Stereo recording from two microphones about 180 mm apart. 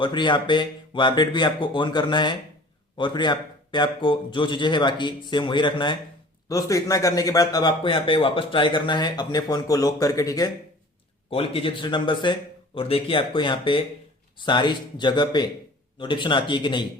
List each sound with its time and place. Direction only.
0.0 s speech: 25° left (ahead or behind)
11.3 s speech: 30° left (ahead or behind)